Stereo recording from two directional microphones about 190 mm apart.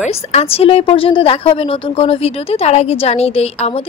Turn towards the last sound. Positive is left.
turn(degrees=35)  # may be behind; listen again after turning